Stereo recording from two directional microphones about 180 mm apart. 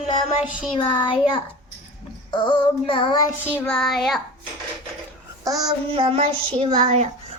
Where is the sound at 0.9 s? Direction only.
25° left (ahead or behind).